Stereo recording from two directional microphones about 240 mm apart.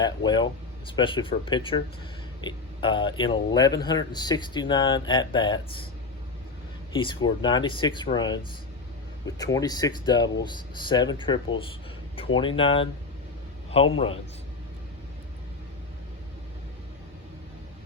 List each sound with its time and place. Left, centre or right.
0.0 s a man's voice: centre
6.9 s a man's voice: centre